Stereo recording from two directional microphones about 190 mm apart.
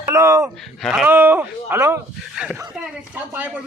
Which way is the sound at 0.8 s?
Centre (ahead or behind).